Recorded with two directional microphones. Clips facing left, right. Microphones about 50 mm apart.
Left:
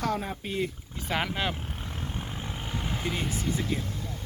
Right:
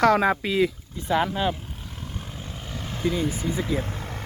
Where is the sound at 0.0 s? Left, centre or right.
Right.